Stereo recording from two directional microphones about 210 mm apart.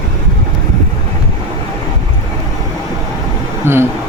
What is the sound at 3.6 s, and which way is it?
Vehicle, 10° right (ahead or behind).